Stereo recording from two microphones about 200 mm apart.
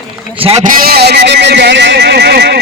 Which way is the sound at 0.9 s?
55° right (ahead or behind).